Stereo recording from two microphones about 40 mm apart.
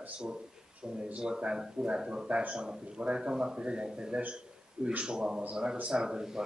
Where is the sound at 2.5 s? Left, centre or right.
Centre.